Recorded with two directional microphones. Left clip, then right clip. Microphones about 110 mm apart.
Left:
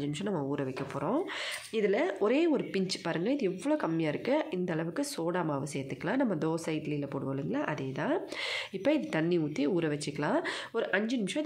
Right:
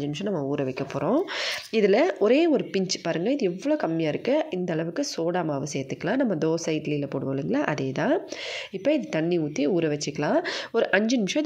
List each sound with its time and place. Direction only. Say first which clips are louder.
0.2 s speech: right 7 dB; 20° right (ahead or behind)
1.7 s speech: right 8 dB; 60° right (ahead or behind)
2.1 s speech: right 7 dB; 30° right (ahead or behind)
8.8 s speech: right 5 dB; 15° right (ahead or behind)
10.7 s speech: right 10 dB; 55° right (ahead or behind)